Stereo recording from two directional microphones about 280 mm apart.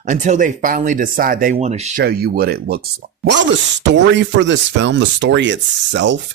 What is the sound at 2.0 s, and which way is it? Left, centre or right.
Speech, right.